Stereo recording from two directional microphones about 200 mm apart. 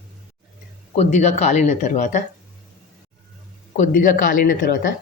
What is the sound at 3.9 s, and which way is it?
Speech, 40° left (ahead or behind).